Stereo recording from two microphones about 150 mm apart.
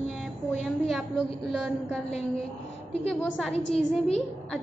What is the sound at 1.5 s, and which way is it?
Speech, 5° right (ahead or behind).